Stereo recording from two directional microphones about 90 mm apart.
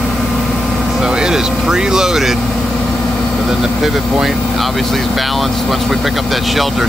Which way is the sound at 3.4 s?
Centre (ahead or behind).